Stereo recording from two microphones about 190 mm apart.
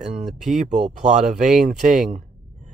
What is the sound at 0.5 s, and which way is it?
Speech, 35° right (ahead or behind).